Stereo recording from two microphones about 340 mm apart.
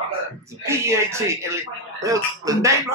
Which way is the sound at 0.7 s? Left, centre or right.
Centre.